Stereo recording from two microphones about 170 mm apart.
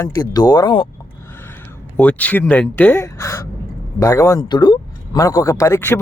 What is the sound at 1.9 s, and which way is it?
Speech, 10° left (ahead or behind).